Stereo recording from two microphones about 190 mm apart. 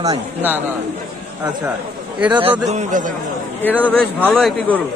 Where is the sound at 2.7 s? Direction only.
40° right (ahead or behind).